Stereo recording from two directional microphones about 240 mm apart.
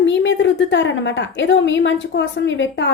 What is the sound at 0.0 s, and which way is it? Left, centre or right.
Speech, left.